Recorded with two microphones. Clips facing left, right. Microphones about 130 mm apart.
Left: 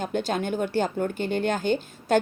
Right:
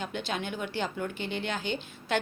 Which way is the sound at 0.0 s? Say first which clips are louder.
Left 7 dB; 45° left (ahead or behind).